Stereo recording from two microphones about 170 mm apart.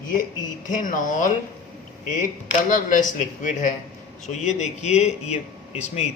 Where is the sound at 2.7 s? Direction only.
50° left (ahead or behind).